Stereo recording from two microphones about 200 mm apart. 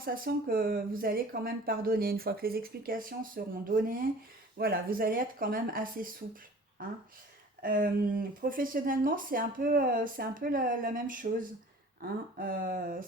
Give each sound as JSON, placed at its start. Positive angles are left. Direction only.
{"t": 0.0, "sound": "speech", "side_deg": -45}
{"t": 7.6, "sound": "speech", "side_deg": -45}